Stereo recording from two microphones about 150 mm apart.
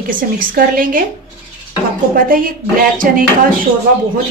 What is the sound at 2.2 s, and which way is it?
Speech, 70° right (ahead or behind).